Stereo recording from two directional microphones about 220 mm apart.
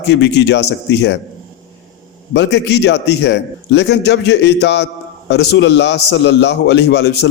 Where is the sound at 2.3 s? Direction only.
50° left (ahead or behind).